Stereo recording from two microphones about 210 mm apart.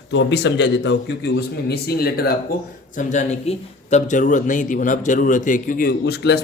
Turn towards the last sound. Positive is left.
turn(degrees=50)  # may be behind; listen again after turning